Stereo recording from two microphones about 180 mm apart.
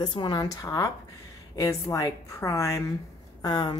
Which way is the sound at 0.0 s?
25° left (ahead or behind).